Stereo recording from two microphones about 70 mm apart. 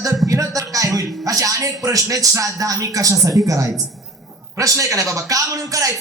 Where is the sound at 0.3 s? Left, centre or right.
Right.